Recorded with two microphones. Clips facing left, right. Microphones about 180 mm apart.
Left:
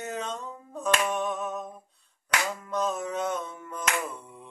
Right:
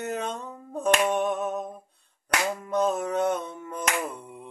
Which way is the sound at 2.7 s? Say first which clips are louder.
Right 5 dB; 60° right (ahead or behind).